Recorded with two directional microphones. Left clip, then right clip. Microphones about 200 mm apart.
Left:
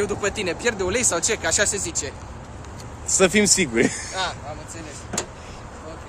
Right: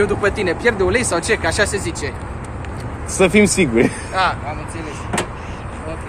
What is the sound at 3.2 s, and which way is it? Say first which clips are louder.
Speech: right 4 dB; 20° left (ahead or behind).